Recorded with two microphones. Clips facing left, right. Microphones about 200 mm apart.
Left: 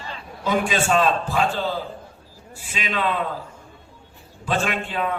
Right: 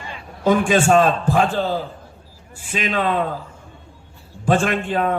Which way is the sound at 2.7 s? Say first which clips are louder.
Right 4 dB; 45° right (ahead or behind).